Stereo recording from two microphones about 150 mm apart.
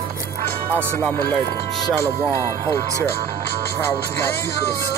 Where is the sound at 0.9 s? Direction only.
10° left (ahead or behind).